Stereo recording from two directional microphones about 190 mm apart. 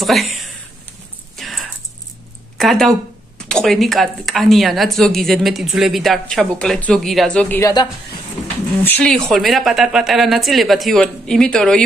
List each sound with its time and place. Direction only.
0.0 s a woman's voice: centre (ahead or behind)
1.3 s a sound: centre (ahead or behind)
2.5 s a woman's voice: centre (ahead or behind)
7.7 s a woman's voice: 20° left (ahead or behind)
8.8 s a woman's voice: 5° left (ahead or behind)